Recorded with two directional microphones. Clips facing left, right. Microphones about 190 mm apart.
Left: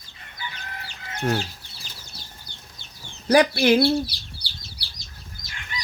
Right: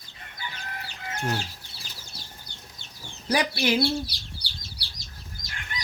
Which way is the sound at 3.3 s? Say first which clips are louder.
Left 8 dB; 55° left (ahead or behind).